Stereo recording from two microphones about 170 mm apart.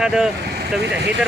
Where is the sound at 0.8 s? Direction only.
80° right.